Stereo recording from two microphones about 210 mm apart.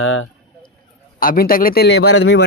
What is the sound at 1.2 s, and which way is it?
Speech, 45° left (ahead or behind).